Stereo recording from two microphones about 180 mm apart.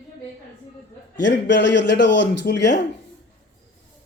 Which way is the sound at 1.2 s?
80° left.